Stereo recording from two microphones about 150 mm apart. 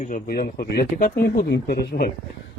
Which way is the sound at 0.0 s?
75° left (ahead or behind).